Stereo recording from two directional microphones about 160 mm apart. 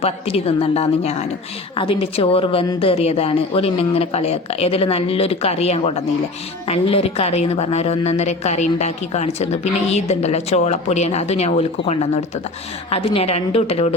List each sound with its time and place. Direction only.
0.0 s a woman's voice: 40° left (ahead or behind)